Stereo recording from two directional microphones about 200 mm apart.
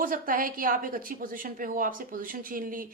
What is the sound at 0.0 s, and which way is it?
A woman's voice, 45° right (ahead or behind).